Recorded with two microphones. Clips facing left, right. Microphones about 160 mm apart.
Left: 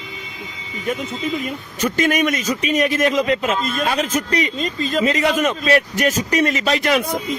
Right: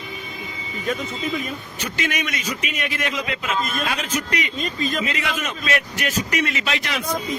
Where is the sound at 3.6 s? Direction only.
30° left (ahead or behind); by 7.1 s 50° left (ahead or behind).